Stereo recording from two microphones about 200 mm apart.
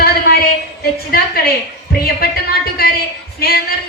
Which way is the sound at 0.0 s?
50° left (ahead or behind).